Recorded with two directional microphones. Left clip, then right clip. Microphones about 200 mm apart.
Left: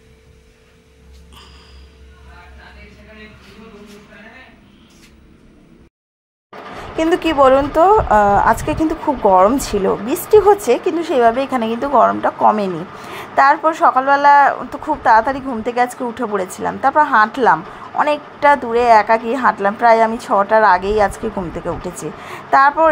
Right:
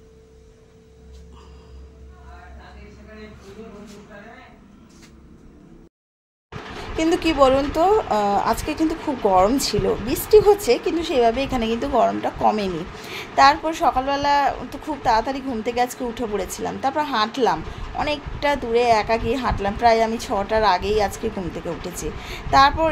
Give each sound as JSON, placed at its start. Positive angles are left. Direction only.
{"t": 7.0, "sound": "a woman's voice", "side_deg": 15}